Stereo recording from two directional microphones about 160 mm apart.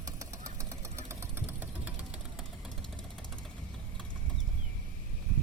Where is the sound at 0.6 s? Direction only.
20° right (ahead or behind).